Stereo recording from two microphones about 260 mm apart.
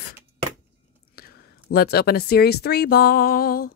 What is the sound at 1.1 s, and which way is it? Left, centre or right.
Speech, left.